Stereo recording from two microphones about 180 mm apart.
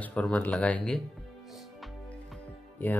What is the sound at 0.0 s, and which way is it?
Speech, 5° left (ahead or behind).